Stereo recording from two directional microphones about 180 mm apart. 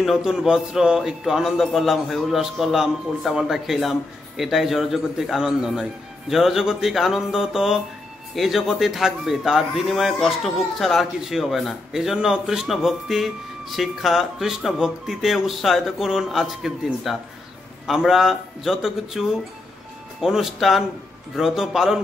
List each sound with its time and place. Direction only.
0.0 s a man's voice: centre (ahead or behind)